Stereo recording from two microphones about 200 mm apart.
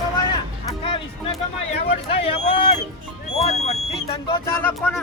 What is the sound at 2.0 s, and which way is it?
Speech, 30° left (ahead or behind).